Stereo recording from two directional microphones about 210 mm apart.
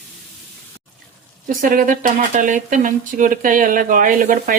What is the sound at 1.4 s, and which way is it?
Speech, 40° right (ahead or behind).